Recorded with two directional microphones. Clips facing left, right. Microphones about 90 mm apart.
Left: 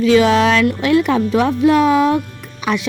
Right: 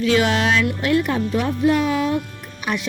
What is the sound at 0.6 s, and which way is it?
Speech, 75° left (ahead or behind).